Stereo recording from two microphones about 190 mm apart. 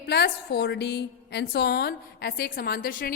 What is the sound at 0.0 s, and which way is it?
A woman's voice, 60° left (ahead or behind).